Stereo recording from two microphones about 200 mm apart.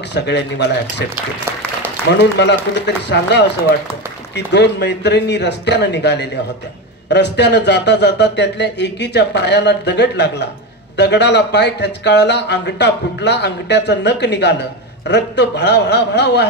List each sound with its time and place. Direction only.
0.1 s speech: 60° left (ahead or behind)
2.1 s speech: 60° left (ahead or behind)